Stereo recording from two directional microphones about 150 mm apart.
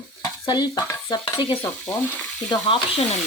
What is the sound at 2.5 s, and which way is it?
Speech, 35° left (ahead or behind).